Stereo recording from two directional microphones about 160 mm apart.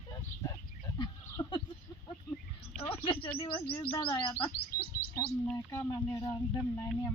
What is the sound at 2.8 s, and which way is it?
Speech, 35° left (ahead or behind).